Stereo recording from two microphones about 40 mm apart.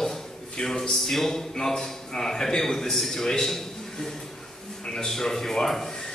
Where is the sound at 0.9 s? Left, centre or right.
Centre.